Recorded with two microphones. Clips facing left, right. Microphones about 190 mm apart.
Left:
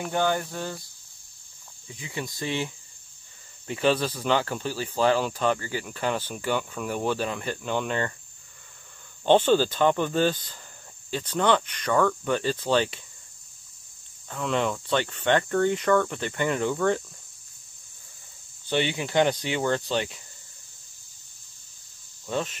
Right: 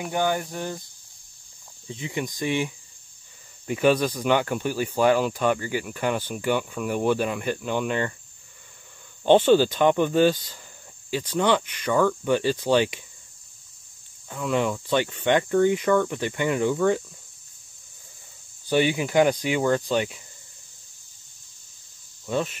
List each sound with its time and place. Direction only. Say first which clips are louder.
0.0 s cricket: right 1 dB; 15° right (ahead or behind)
1.9 s cricket: right 5 dB; 20° right (ahead or behind)
9.2 s cricket: right 3 dB; 10° right (ahead or behind)
14.3 s cricket: right 2 dB; 10° right (ahead or behind)
18.9 s cricket: right 3 dB; 10° right (ahead or behind)
22.3 s cricket: right 3 dB; 10° right (ahead or behind)